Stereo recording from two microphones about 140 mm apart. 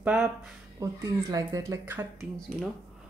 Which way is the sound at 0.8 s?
20° right (ahead or behind).